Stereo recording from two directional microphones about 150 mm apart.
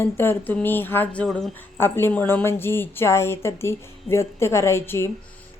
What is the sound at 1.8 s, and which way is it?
Speech, 15° left (ahead or behind).